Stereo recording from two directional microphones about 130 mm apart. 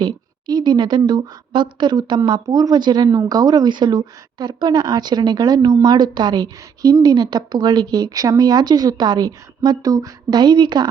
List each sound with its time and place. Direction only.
0.0 s a woman's voice: 35° right (ahead or behind)